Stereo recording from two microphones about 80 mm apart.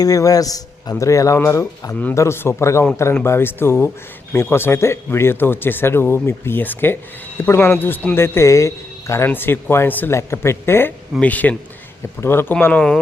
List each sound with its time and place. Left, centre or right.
0.0 s a man's voice: left
9.3 s speech: left
10.1 s a man's voice: left
11.2 s speech: centre
12.2 s speech: left